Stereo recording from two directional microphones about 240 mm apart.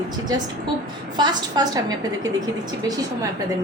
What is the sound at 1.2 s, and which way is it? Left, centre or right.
Speech, centre.